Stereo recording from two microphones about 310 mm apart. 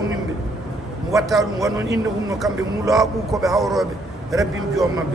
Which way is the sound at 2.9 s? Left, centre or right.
Centre.